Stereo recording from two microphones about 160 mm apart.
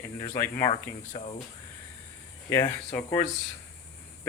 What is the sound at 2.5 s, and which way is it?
Speech, 15° left (ahead or behind).